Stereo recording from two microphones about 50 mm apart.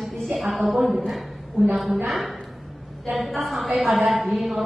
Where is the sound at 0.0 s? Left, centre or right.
Centre.